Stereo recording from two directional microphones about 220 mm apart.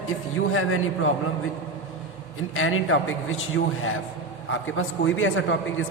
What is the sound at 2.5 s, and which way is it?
Speech, 65° left (ahead or behind).